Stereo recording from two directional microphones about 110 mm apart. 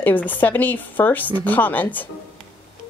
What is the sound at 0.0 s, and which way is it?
Speech, 15° left (ahead or behind).